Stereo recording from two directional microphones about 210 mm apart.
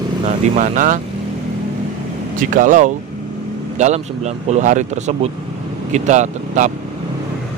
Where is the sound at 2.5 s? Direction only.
40° right (ahead or behind).